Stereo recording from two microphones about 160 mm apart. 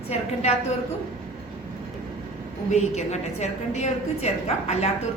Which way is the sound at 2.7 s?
45° left (ahead or behind).